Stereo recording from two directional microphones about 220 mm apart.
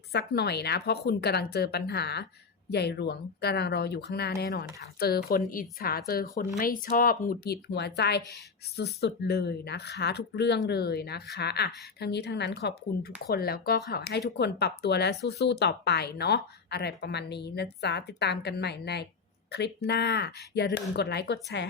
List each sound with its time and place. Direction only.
0.1 s a woman's voice: 50° left (ahead or behind)